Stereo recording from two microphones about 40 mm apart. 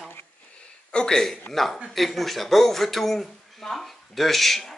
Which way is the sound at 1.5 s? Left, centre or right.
Left.